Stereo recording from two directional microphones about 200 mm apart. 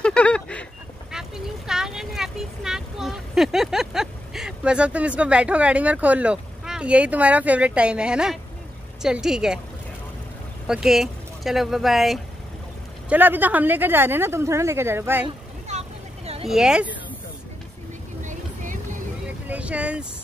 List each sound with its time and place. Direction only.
0.0 s a sound: 5° left (ahead or behind)
1.1 s a woman's voice: centre (ahead or behind)
10.7 s speech: centre (ahead or behind)
16.4 s a woman's voice: 5° right (ahead or behind)
18.2 s vehicle: 40° right (ahead or behind)
19.4 s vehicle: 5° right (ahead or behind)